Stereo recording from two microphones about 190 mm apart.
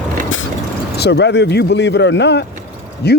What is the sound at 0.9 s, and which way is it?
Speech, 60° left (ahead or behind).